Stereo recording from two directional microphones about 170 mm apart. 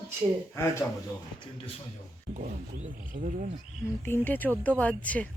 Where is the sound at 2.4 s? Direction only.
50° right (ahead or behind).